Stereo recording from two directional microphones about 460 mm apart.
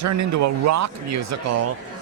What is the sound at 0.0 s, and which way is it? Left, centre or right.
Speech, right.